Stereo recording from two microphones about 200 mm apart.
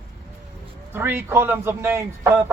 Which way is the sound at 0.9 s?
10° right (ahead or behind).